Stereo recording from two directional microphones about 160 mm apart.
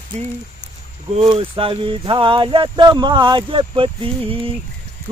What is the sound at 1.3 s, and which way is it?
Speech, 35° right (ahead or behind).